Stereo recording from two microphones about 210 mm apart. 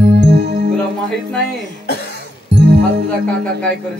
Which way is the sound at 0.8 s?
5° left (ahead or behind).